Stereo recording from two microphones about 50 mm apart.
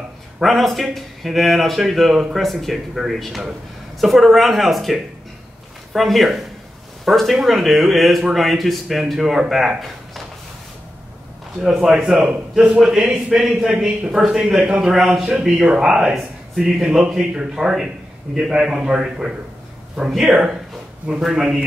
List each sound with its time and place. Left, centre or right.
0.4 s speech: centre
2.9 s speech: centre
11.6 s speech: centre
12.0 s a man's voice: centre
15.1 s a man's voice: centre